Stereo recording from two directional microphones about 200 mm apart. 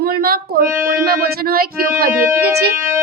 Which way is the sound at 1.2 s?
50° right (ahead or behind).